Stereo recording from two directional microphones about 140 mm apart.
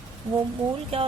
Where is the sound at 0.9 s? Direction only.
40° right (ahead or behind).